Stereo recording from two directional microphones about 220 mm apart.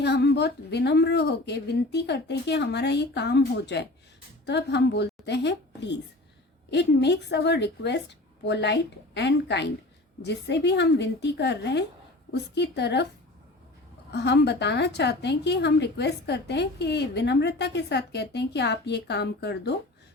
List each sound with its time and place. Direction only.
0.0 s a woman's voice: 50° left (ahead or behind)
14.1 s a woman's voice: 50° left (ahead or behind)